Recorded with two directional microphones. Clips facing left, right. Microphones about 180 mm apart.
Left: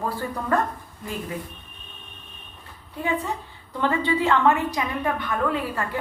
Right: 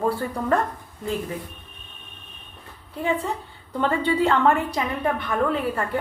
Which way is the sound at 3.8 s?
35° right (ahead or behind).